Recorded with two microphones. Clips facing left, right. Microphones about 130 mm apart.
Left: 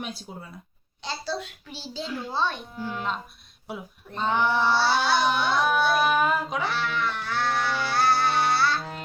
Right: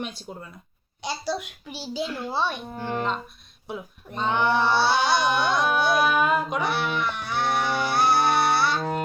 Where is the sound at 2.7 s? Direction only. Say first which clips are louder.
Right 4 dB; 55° right (ahead or behind).